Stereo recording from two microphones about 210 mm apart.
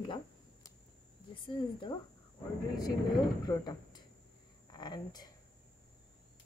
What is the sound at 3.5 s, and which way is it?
Speech, 20° left (ahead or behind).